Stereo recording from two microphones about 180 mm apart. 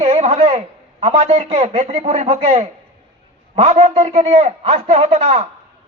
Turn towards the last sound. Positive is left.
turn(degrees=-35)  # may be behind; listen again after turning